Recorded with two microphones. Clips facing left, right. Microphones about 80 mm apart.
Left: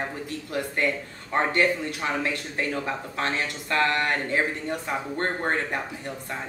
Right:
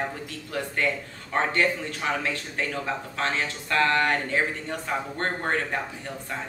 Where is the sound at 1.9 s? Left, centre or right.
Centre.